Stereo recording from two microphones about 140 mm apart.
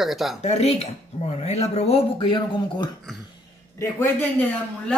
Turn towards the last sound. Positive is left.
turn(degrees=15)  # may be behind; listen again after turning